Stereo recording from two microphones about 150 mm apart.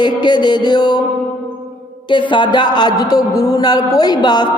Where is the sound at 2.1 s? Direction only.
30° left (ahead or behind).